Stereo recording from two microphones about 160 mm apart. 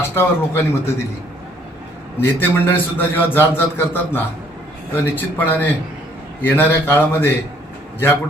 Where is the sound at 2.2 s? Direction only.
10° left (ahead or behind).